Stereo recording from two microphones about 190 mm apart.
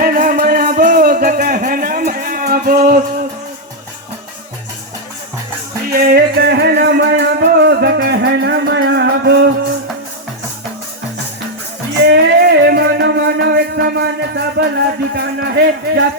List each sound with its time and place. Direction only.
0.0 s a sound: 45° right (ahead or behind)
5.9 s music: 50° right (ahead or behind)
12.0 s music: 60° right (ahead or behind)
15.1 s a man's voice: 60° right (ahead or behind)